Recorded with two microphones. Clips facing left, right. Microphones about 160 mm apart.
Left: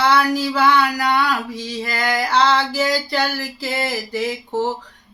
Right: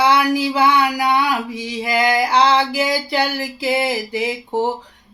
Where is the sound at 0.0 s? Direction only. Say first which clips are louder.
Right 1 dB; 15° right (ahead or behind).